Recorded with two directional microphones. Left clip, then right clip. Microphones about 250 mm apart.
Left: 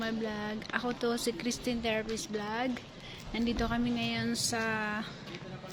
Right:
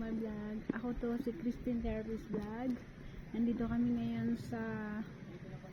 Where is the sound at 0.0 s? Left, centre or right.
Centre.